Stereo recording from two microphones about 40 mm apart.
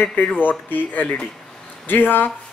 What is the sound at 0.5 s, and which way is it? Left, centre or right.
Speech, left.